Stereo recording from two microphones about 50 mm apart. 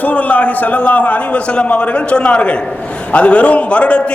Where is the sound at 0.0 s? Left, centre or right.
Left.